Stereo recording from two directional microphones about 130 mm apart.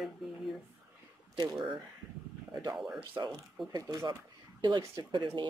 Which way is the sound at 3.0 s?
35° right (ahead or behind).